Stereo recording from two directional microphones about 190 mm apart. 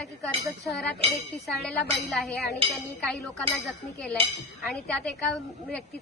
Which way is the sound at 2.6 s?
30° right (ahead or behind).